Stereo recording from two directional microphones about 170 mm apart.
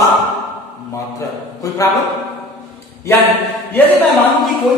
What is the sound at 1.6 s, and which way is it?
Speech, 20° left (ahead or behind).